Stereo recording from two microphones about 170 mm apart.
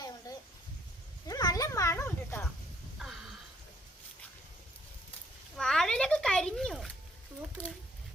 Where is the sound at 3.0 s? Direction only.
Centre (ahead or behind).